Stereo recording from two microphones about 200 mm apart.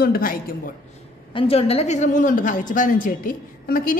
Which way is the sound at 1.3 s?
25° left (ahead or behind).